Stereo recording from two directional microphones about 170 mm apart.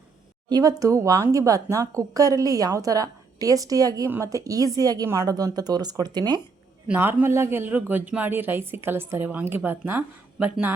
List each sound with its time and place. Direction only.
0.5 s speech: 20° right (ahead or behind)
6.8 s a woman's voice: 10° right (ahead or behind)